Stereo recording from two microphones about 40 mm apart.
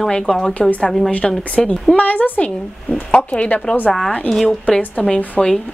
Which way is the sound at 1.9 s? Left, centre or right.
Left.